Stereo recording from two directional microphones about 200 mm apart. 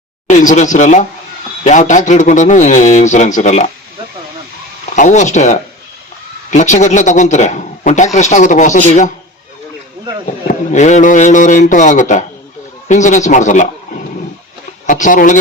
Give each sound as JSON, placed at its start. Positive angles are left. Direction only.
{"t": 0.3, "sound": "a man's voice", "side_deg": 35}
{"t": 4.9, "sound": "a man's voice", "side_deg": 35}
{"t": 10.4, "sound": "a man's voice", "side_deg": 40}
{"t": 14.8, "sound": "a man's voice", "side_deg": 40}